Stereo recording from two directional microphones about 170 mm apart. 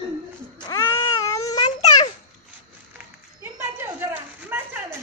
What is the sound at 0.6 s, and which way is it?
Baby cry, 25° left (ahead or behind).